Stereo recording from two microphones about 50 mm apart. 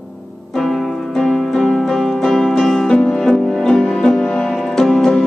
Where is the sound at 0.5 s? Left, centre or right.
Centre.